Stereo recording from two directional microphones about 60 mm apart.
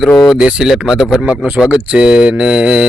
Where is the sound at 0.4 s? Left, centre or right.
Centre.